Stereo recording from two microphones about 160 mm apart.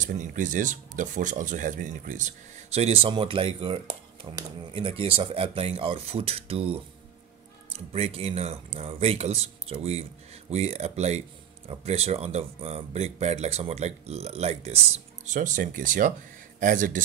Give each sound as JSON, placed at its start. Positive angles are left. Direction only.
{"t": 0.0, "sound": "speech", "side_deg": -55}